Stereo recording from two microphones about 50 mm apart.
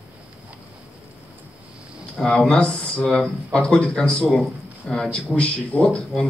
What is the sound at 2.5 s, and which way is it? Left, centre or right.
A man's voice, left.